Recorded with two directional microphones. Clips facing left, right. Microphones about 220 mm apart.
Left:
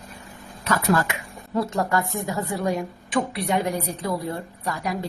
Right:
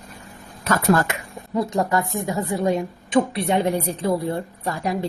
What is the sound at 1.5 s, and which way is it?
Speech, 20° right (ahead or behind).